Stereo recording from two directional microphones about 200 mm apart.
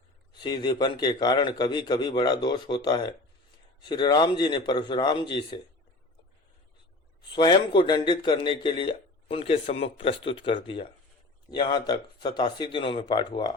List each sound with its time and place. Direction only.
0.4 s a man's voice: 20° left (ahead or behind)
7.3 s a man's voice: 20° left (ahead or behind)